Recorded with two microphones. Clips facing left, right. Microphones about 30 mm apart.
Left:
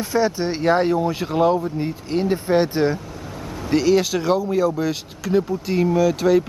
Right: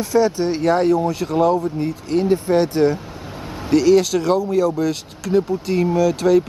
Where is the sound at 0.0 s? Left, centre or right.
Centre.